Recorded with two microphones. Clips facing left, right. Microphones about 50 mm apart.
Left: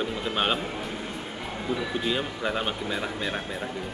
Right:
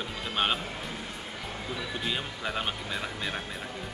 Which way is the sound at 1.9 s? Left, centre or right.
Centre.